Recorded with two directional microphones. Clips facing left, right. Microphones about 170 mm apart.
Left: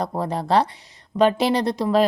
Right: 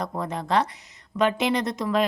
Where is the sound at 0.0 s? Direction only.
30° left (ahead or behind).